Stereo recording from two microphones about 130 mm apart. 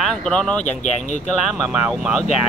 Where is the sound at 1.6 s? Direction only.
5° right (ahead or behind).